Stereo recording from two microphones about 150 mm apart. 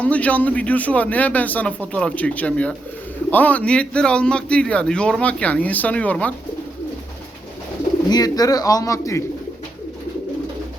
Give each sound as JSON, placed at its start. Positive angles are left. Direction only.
{"t": 0.0, "sound": "speech", "side_deg": 10}
{"t": 8.1, "sound": "a man's voice", "side_deg": 25}